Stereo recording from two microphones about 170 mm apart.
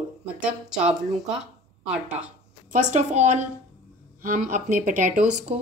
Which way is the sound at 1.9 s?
10° right (ahead or behind).